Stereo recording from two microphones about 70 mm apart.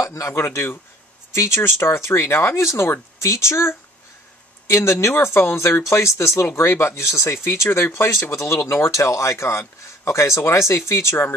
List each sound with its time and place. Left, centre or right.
0.0 s speech: left